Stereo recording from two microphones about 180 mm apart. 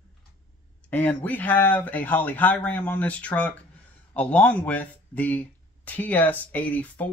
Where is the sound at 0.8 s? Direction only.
10° left (ahead or behind).